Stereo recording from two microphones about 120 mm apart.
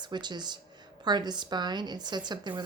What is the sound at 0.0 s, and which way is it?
Speech, 40° right (ahead or behind).